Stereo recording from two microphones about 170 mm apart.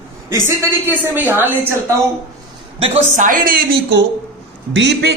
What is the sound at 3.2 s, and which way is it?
Speech, 55° right (ahead or behind).